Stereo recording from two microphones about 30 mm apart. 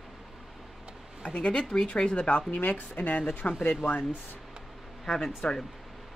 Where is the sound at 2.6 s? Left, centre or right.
Left.